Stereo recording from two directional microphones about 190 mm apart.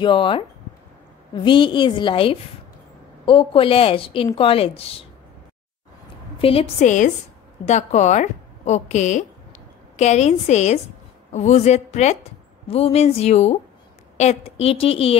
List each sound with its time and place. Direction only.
0.0 s a woman's voice: 25° left (ahead or behind)
6.3 s a woman's voice: 30° left (ahead or behind)